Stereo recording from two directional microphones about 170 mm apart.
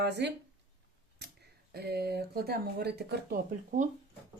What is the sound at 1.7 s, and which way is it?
Speech, 70° right (ahead or behind).